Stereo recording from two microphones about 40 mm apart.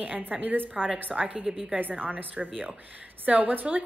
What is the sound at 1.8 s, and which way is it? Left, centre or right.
A woman's voice, right.